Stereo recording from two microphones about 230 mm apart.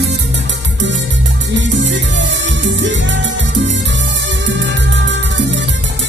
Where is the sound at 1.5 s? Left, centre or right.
Right.